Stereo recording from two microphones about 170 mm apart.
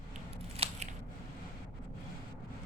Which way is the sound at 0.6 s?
35° right (ahead or behind).